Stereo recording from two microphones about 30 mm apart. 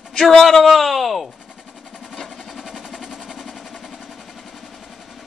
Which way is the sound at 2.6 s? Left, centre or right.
Centre.